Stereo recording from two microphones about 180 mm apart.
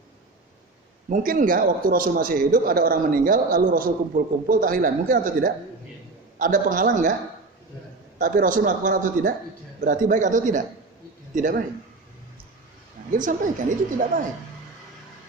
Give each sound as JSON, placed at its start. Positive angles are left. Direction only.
{"t": 1.1, "sound": "a man's voice", "side_deg": -50}
{"t": 8.2, "sound": "a man's voice", "side_deg": -50}
{"t": 13.1, "sound": "a man's voice", "side_deg": -45}